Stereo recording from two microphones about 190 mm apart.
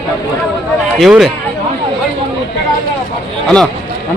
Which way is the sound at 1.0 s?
Centre (ahead or behind).